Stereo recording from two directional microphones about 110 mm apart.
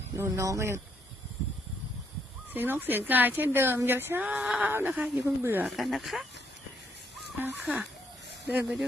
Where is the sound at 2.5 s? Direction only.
15° right (ahead or behind).